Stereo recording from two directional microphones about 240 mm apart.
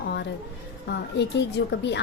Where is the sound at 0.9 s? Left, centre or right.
Left.